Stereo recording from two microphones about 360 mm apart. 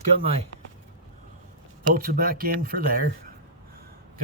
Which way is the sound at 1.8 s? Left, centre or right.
Right.